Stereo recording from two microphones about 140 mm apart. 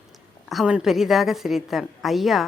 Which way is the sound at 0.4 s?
Centre (ahead or behind).